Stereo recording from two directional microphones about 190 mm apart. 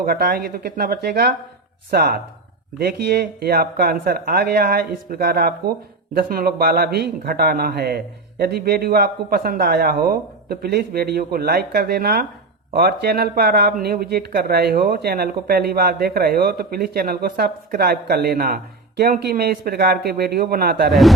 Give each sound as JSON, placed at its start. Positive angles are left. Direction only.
{"t": 0.0, "sound": "speech", "side_deg": -50}